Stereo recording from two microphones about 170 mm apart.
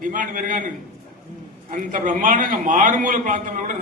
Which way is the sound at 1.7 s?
50° right (ahead or behind).